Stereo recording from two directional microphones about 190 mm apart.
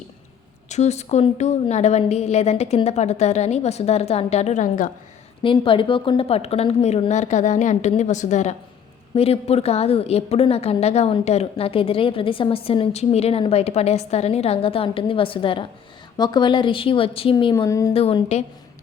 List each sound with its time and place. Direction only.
0.7 s a woman's voice: 35° left (ahead or behind)
5.4 s a woman's voice: 25° left (ahead or behind)
17.9 s a woman's voice: 30° left (ahead or behind)